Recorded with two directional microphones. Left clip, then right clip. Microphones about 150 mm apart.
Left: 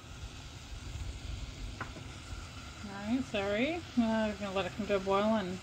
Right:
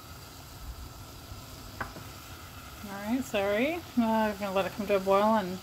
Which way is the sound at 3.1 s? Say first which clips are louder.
Right 5 dB; 10° right (ahead or behind).